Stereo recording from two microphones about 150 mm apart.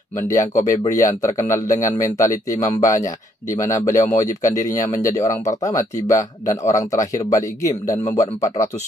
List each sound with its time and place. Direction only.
0.3 s speech: 20° left (ahead or behind)